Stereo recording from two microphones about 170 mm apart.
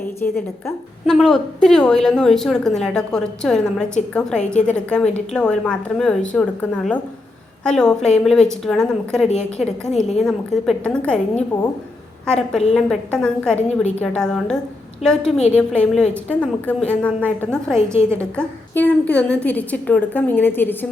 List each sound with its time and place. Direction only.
1.0 s a woman's voice: centre (ahead or behind)
9.2 s a woman's voice: 40° left (ahead or behind)
10.2 s a woman's voice: centre (ahead or behind)
11.5 s speech: 20° left (ahead or behind)
12.3 s a woman's voice: 5° left (ahead or behind)
17.7 s a woman's voice: 15° right (ahead or behind)
18.2 s a woman's voice: 10° left (ahead or behind)